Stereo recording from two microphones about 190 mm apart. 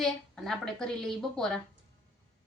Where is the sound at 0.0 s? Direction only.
Centre (ahead or behind).